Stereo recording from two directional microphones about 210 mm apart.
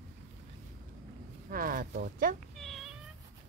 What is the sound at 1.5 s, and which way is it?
Speech, 40° right (ahead or behind).